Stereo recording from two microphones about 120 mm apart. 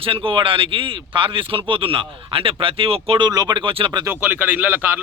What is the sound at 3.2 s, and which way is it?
Speech, 35° right (ahead or behind).